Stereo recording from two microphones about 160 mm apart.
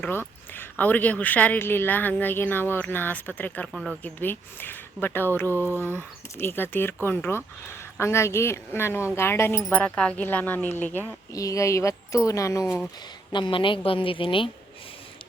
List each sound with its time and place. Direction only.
0.0 s speech: 15° left (ahead or behind)
4.2 s speech: 10° left (ahead or behind)
13.3 s a woman's voice: 30° left (ahead or behind)